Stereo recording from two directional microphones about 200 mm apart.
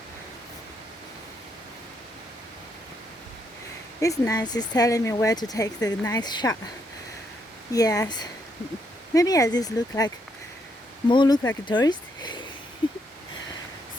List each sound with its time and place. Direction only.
4.0 s speech: 15° left (ahead or behind)
7.7 s speech: 15° left (ahead or behind)
9.1 s speech: 15° left (ahead or behind)
11.1 s speech: 20° left (ahead or behind)